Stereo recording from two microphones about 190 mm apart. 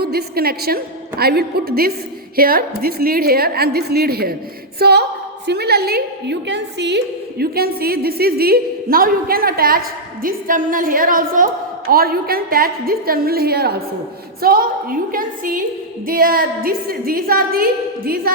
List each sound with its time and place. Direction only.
0.0 s a woman's voice: 55° right (ahead or behind)